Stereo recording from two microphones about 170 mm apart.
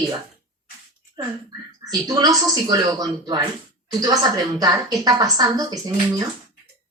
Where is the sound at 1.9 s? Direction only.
20° right (ahead or behind).